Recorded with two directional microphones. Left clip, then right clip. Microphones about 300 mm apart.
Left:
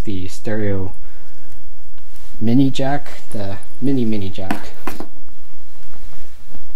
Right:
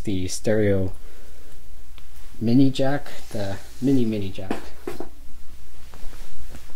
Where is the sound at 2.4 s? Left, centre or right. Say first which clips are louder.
Left 3 dB; centre.